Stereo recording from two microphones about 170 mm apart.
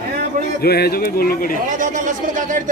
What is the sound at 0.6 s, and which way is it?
Speech, 65° left (ahead or behind).